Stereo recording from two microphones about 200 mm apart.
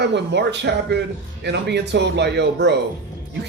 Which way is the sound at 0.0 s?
55° right (ahead or behind).